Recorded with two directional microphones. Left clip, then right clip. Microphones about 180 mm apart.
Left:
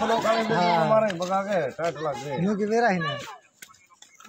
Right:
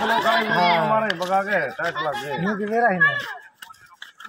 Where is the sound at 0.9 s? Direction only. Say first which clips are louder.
Right 2 dB; 60° left (ahead or behind).